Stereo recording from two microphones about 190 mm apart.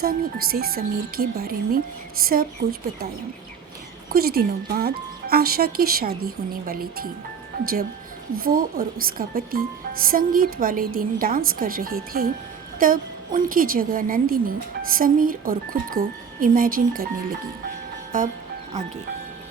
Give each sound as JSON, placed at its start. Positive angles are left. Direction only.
{"t": 0.0, "sound": "a woman's voice", "side_deg": -50}
{"t": 4.1, "sound": "a woman's voice", "side_deg": -55}